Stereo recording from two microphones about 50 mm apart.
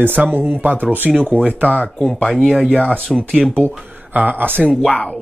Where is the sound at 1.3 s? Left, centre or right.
Left.